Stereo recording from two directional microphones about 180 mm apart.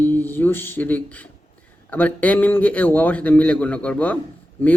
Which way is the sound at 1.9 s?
10° left (ahead or behind).